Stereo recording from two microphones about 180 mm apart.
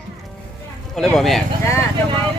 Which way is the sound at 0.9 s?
Centre (ahead or behind).